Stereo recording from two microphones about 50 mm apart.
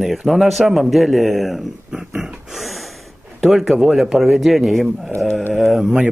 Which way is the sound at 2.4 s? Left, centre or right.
Centre.